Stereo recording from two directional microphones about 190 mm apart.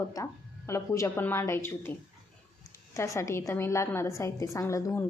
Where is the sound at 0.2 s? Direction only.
20° left (ahead or behind).